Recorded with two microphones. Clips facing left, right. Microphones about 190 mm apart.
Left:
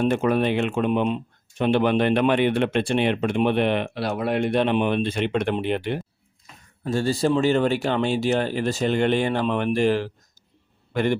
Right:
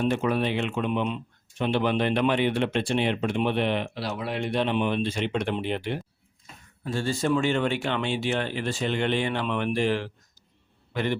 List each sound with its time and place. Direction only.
0.0 s speech: 50° left (ahead or behind)
6.8 s a man's voice: 40° left (ahead or behind)